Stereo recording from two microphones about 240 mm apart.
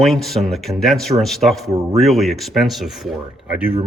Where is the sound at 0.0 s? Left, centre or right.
Centre.